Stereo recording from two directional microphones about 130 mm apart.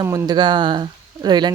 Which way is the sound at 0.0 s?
25° right (ahead or behind).